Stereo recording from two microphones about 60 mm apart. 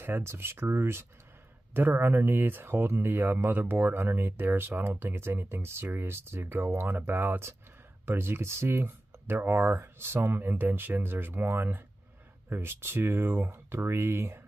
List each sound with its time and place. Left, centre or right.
0.0 s speech: right